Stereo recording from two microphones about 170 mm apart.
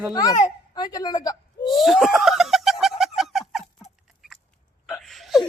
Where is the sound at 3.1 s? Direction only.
Centre (ahead or behind).